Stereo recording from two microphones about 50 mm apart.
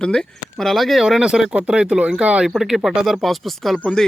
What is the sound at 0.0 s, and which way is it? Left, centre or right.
Speech, centre.